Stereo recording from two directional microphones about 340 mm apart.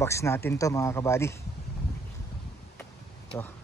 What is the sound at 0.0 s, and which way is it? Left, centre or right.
Speech, centre.